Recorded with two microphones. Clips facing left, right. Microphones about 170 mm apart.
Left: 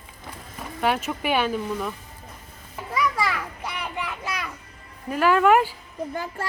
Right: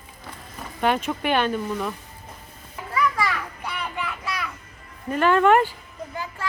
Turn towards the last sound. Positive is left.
turn(degrees=45)  # may be behind; listen again after turning